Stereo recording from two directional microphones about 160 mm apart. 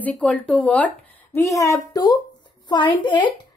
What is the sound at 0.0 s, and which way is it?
A woman's voice, 10° left (ahead or behind).